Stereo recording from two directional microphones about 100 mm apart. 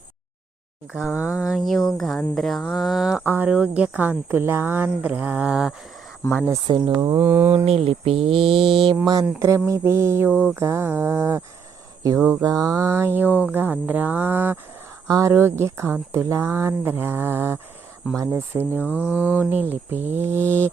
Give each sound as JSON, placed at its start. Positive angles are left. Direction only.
{"t": 0.9, "sound": "a sound", "side_deg": -10}
{"t": 3.2, "sound": "speech", "side_deg": -20}
{"t": 6.2, "sound": "speech", "side_deg": 20}
{"t": 6.7, "sound": "speech", "side_deg": -50}
{"t": 6.9, "sound": "a sound", "side_deg": -35}
{"t": 7.2, "sound": "speech", "side_deg": -20}
{"t": 7.6, "sound": "speech", "side_deg": -75}
{"t": 9.6, "sound": "speech", "side_deg": -30}
{"t": 12.0, "sound": "a sound", "side_deg": -30}
{"t": 12.4, "sound": "speech", "side_deg": -35}
{"t": 15.0, "sound": "speech", "side_deg": -35}